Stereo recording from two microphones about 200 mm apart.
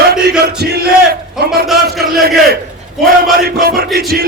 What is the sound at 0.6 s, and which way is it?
Speech, 50° right (ahead or behind).